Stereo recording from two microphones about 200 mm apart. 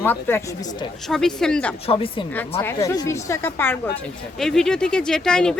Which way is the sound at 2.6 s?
15° left (ahead or behind).